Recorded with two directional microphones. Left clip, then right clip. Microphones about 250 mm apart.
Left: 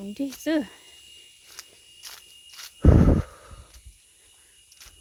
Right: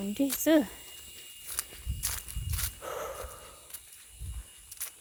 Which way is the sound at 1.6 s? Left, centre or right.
Right.